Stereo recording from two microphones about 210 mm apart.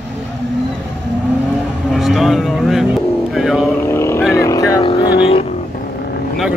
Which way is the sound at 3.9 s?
10° left (ahead or behind).